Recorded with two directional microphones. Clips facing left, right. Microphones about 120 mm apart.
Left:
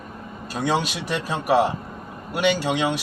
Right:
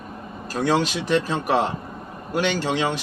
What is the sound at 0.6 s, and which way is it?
Speech, 15° left (ahead or behind).